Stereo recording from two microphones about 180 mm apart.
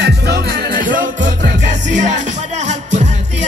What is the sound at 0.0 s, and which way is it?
Music, 65° right (ahead or behind).